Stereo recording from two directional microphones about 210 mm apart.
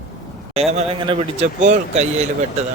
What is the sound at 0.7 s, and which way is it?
Speech, 30° right (ahead or behind).